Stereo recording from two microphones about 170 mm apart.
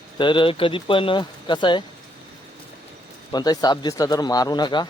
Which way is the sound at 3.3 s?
25° left (ahead or behind).